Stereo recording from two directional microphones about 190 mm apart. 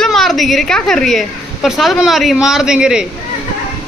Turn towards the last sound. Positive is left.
turn(degrees=-5)  # may be behind; listen again after turning